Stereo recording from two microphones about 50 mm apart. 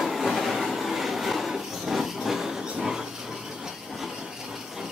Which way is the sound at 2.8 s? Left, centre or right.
Centre.